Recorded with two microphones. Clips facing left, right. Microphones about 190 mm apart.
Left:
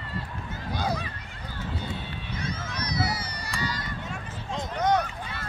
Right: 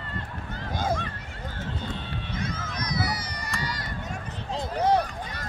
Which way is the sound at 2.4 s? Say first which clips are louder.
Left 1 dB; 50° right (ahead or behind).